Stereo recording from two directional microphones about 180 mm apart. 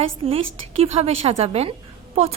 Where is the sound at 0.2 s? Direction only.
35° right (ahead or behind).